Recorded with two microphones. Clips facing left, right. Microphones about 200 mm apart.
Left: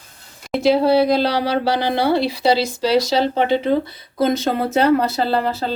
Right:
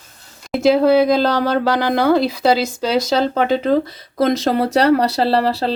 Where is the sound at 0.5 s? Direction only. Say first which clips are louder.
Right 2 dB; centre (ahead or behind).